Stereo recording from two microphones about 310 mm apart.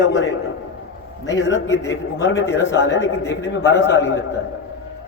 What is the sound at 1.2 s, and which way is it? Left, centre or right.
A man's voice, left.